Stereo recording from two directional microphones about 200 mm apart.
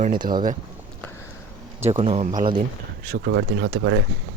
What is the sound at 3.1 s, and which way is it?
Speech, 60° right (ahead or behind).